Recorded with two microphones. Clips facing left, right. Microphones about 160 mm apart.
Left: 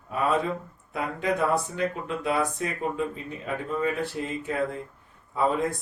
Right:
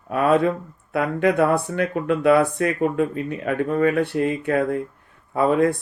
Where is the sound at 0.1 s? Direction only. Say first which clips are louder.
Right 7 dB; 65° right (ahead or behind).